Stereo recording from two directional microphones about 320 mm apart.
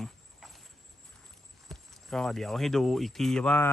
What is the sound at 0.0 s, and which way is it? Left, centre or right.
Horse, centre.